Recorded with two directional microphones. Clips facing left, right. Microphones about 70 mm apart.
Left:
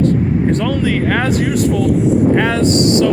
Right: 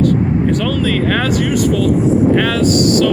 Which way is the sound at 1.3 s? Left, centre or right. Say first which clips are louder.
Even; left.